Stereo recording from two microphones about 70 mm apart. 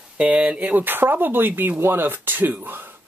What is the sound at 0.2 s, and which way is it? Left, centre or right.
Speech, centre.